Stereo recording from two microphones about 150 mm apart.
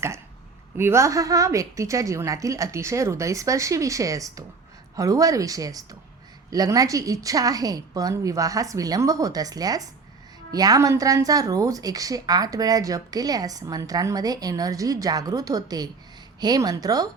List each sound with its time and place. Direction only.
0.8 s speech: 20° right (ahead or behind)